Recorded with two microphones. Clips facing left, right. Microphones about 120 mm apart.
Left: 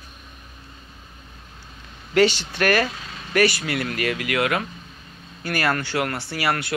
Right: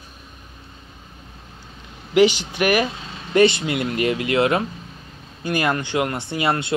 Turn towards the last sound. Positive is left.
turn(degrees=-25)  # may be behind; listen again after turning